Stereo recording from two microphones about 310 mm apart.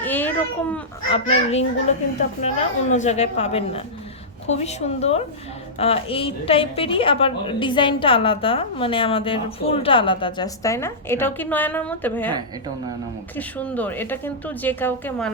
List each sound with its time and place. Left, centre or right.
0.0 s a sound: centre
1.1 s a woman's voice: centre
12.3 s a woman's voice: centre
13.3 s speech: centre